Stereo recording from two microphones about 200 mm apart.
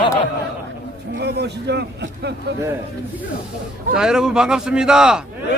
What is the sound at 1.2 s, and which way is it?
A man's voice, 55° right (ahead or behind).